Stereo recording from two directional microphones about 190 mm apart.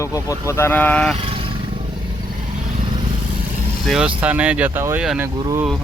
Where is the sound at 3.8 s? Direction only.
5° right (ahead or behind).